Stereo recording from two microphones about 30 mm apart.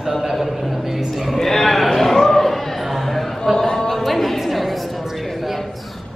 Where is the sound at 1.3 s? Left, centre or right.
Centre.